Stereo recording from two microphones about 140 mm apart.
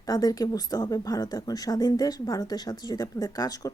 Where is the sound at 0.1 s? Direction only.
25° left (ahead or behind).